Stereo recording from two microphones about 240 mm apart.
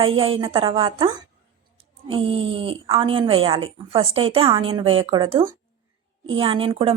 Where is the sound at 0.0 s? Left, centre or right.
Right.